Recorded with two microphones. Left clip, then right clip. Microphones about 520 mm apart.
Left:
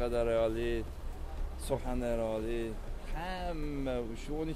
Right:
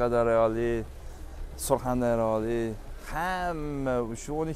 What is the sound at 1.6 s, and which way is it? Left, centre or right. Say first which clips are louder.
Speech: right 9 dB; right.